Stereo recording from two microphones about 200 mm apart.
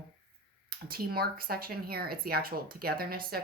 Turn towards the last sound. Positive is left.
turn(degrees=-50)  # may be behind; listen again after turning